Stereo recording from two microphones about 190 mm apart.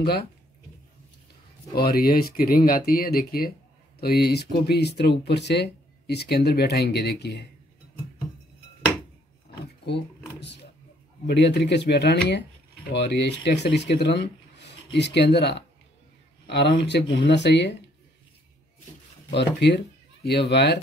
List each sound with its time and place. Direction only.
1.8 s speech: 50° left (ahead or behind)
9.8 s a sound: 65° left (ahead or behind)
11.2 s speech: 65° left (ahead or behind)
19.3 s speech: 65° left (ahead or behind)